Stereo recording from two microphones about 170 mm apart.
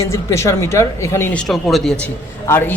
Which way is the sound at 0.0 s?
15° left (ahead or behind).